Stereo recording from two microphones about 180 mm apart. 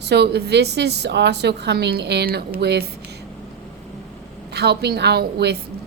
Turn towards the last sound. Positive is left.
turn(degrees=-65)  # may be behind; listen again after turning